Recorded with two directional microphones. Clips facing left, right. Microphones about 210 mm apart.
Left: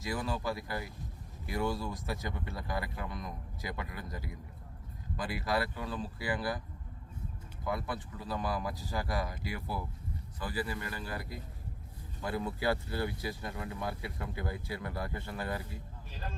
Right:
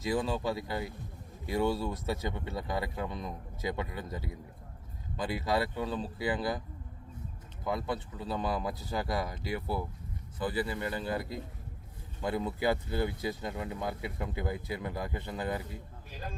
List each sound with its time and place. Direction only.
0.0 s speech: 20° right (ahead or behind)
7.6 s speech: 20° right (ahead or behind)